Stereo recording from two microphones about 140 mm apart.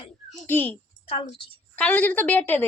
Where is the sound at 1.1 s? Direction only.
40° left (ahead or behind).